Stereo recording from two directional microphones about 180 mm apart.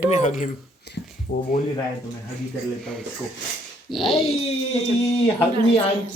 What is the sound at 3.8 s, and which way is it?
Speech, centre (ahead or behind).